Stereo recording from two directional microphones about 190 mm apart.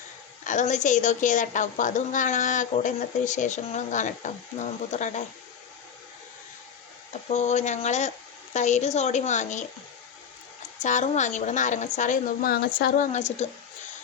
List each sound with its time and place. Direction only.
0.4 s a woman's voice: 40° left (ahead or behind)
7.1 s a woman's voice: 35° left (ahead or behind)
10.8 s a woman's voice: 40° left (ahead or behind)
13.1 s a woman's voice: 35° left (ahead or behind)